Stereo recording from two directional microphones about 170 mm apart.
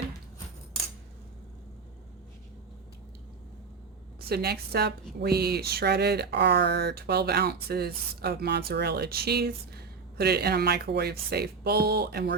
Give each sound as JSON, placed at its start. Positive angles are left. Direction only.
{"t": 4.2, "sound": "a woman's voice", "side_deg": -65}